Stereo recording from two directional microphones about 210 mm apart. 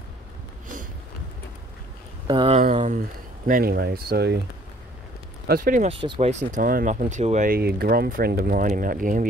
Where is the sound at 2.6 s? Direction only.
35° right (ahead or behind).